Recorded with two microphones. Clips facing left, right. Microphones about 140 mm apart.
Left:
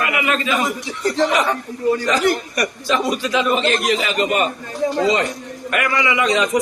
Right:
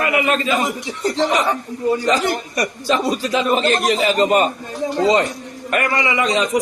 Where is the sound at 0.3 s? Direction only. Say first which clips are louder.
Right 2 dB; 35° right (ahead or behind).